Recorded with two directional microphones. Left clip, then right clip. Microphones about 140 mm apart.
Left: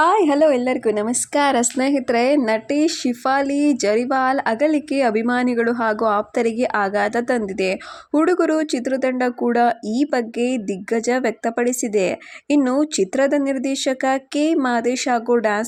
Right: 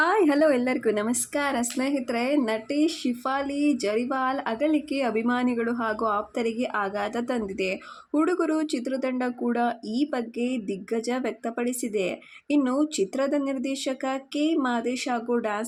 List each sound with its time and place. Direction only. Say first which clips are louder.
0.0 s a woman's voice: left 6 dB; 20° left (ahead or behind)
1.3 s speech: left 13 dB; 45° left (ahead or behind)